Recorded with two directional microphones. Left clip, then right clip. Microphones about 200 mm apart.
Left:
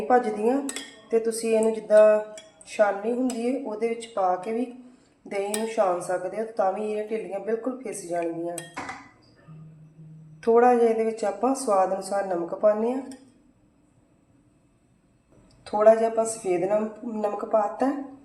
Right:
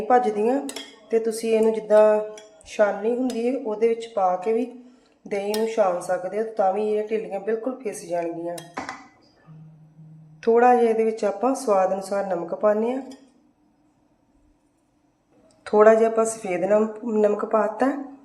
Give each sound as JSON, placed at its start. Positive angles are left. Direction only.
{"t": 0.1, "sound": "speech", "side_deg": -10}
{"t": 10.4, "sound": "speech", "side_deg": -15}
{"t": 15.6, "sound": "speech", "side_deg": -25}